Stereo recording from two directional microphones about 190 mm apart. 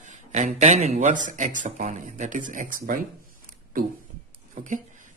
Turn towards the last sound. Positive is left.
turn(degrees=-40)  # may be behind; listen again after turning